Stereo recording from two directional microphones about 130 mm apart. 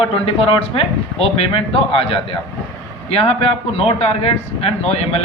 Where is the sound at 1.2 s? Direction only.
50° left (ahead or behind).